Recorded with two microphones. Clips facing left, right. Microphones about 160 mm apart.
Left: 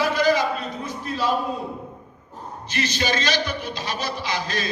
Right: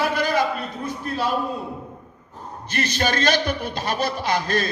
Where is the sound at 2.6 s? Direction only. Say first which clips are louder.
Right 2 dB; 55° right (ahead or behind).